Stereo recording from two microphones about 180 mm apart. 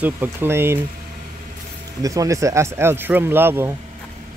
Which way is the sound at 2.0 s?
20° right (ahead or behind).